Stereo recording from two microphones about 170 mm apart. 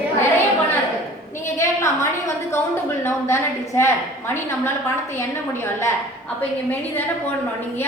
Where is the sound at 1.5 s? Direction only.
15° left (ahead or behind).